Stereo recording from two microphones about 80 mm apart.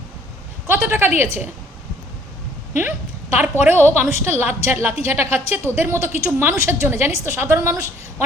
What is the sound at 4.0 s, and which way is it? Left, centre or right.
A woman's voice, right.